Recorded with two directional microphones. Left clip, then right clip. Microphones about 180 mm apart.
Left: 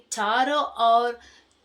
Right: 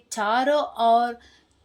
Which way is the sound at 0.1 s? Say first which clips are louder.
Right 1 dB; 40° right (ahead or behind).